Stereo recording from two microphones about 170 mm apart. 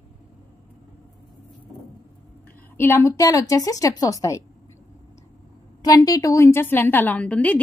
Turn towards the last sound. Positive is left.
turn(degrees=5)  # may be behind; listen again after turning